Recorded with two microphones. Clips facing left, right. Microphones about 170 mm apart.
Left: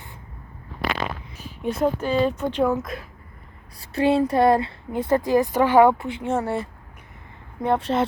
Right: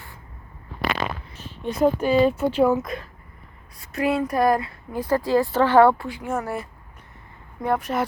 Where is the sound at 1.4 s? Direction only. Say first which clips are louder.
Left 3 dB; 5° left (ahead or behind).